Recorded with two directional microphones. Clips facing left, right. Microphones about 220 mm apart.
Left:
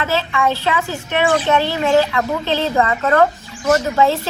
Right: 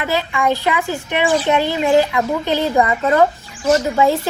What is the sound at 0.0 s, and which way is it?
Speech, 15° right (ahead or behind).